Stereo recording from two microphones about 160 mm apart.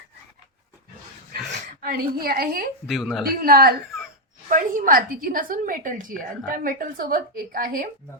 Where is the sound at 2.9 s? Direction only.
Centre (ahead or behind).